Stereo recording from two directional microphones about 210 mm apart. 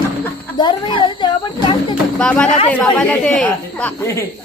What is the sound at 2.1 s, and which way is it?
Speech, 5° left (ahead or behind).